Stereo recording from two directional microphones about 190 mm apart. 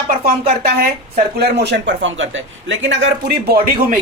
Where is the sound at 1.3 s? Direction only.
60° right (ahead or behind).